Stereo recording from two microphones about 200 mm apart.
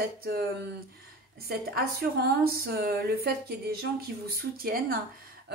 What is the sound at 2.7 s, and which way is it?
Speech, 50° right (ahead or behind).